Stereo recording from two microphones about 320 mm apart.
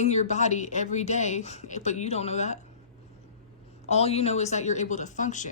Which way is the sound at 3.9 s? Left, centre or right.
Centre.